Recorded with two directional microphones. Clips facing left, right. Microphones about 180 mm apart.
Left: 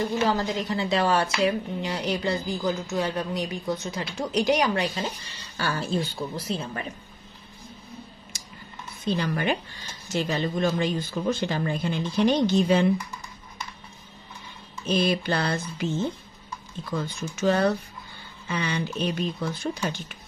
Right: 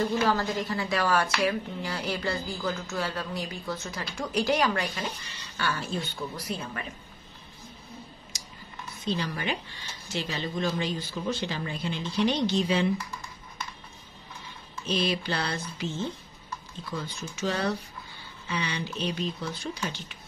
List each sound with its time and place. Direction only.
0.2 s a woman's voice: 20° left (ahead or behind)
5.2 s speech: 35° left (ahead or behind)
8.3 s a sound: 55° left (ahead or behind)
9.0 s speech: 50° left (ahead or behind)
14.9 s speech: 50° left (ahead or behind)
16.9 s speech: 50° left (ahead or behind)